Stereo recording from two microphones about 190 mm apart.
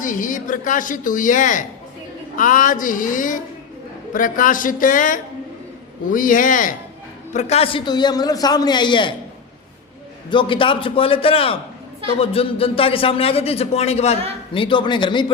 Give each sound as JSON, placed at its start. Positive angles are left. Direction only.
{"t": 0.0, "sound": "speech", "side_deg": 45}
{"t": 7.3, "sound": "a man's voice", "side_deg": 35}
{"t": 10.2, "sound": "a man's voice", "side_deg": 25}